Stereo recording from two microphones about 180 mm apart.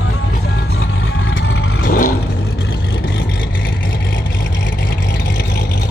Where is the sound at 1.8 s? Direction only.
50° left (ahead or behind).